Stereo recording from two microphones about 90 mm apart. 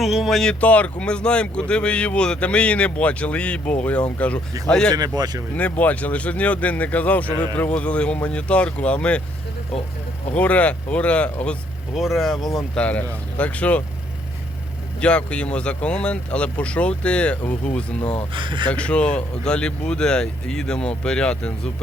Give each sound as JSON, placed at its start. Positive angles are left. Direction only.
{"t": 0.0, "sound": "speech", "side_deg": 0}
{"t": 0.6, "sound": "speech", "side_deg": 15}
{"t": 4.9, "sound": "speech", "side_deg": -45}
{"t": 5.5, "sound": "speech", "side_deg": 15}
{"t": 10.3, "sound": "speech", "side_deg": 15}
{"t": 11.9, "sound": "speech", "side_deg": 0}
{"t": 12.7, "sound": "speech", "side_deg": 15}
{"t": 15.0, "sound": "speech", "side_deg": 10}
{"t": 18.3, "sound": "speech", "side_deg": -65}
{"t": 18.7, "sound": "speech", "side_deg": 10}